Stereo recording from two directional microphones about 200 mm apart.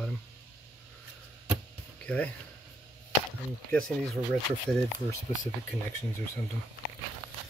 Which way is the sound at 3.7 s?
5° left (ahead or behind).